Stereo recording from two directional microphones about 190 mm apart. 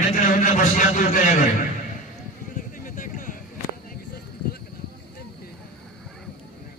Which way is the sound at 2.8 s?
45° left (ahead or behind).